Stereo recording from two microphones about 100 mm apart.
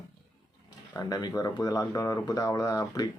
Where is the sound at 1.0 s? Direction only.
40° left (ahead or behind).